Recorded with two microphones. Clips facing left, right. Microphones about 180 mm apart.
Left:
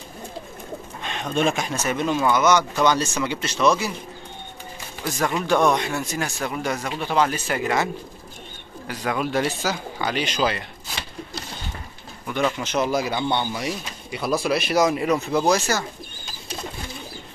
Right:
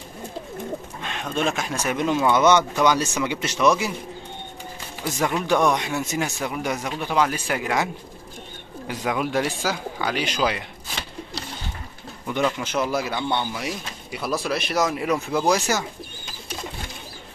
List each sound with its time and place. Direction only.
1.0 s speech: centre (ahead or behind)
1.8 s speech: 15° right (ahead or behind)
2.3 s speech: 25° right (ahead or behind)
2.8 s speech: 15° right (ahead or behind)
5.5 s speech: 10° right (ahead or behind)
9.0 s speech: 10° right (ahead or behind)
12.4 s speech: centre (ahead or behind)